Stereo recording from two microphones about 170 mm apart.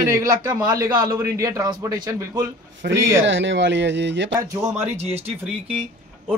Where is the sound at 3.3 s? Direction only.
90° right.